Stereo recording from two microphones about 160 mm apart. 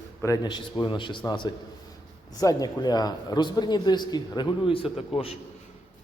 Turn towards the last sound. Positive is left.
turn(degrees=40)  # may be behind; listen again after turning